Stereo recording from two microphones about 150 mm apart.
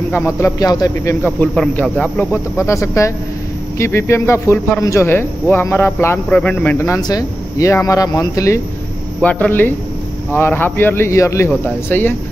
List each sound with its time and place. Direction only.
0.1 s speech: 15° left (ahead or behind)
1.2 s speech: 5° left (ahead or behind)
7.0 s speech: 25° left (ahead or behind)
9.2 s speech: 10° left (ahead or behind)